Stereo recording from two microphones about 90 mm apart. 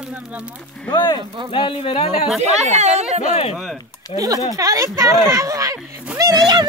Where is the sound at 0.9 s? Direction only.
55° left (ahead or behind); by 2.0 s 75° left (ahead or behind).